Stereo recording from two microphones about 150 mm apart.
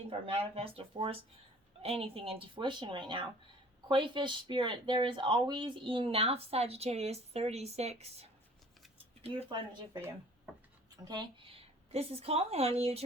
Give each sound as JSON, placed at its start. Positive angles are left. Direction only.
{"t": 0.1, "sound": "speech", "side_deg": -40}
{"t": 11.1, "sound": "a woman's voice", "side_deg": -35}